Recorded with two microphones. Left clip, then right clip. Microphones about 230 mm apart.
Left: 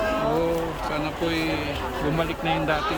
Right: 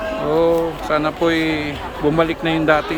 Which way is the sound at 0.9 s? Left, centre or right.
Centre.